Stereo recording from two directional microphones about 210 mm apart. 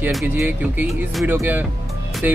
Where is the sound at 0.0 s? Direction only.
5° right (ahead or behind).